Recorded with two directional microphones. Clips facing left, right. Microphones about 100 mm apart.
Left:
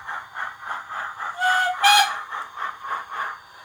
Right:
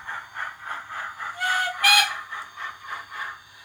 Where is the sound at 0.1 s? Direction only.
25° left (ahead or behind).